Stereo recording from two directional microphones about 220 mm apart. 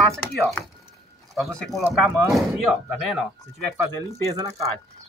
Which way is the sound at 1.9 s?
10° right (ahead or behind).